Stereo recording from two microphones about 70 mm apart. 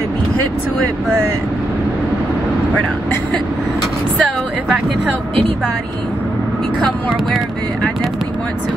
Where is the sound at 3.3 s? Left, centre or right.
Centre.